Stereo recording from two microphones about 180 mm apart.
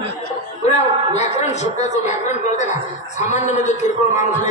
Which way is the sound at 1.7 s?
40° left (ahead or behind).